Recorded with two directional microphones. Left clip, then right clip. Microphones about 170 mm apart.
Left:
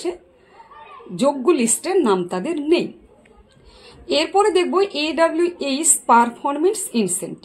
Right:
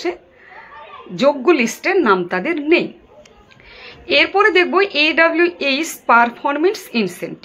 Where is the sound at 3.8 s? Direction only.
15° left (ahead or behind).